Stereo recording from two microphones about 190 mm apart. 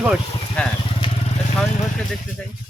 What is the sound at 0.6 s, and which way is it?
Speech, 5° left (ahead or behind).